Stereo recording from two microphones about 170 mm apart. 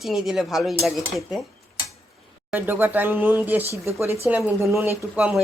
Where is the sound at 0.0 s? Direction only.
Centre (ahead or behind).